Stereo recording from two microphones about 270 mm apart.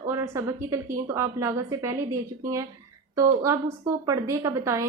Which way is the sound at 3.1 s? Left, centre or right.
Centre.